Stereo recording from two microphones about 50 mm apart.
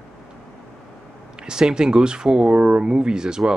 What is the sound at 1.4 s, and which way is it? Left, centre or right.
Speech, centre.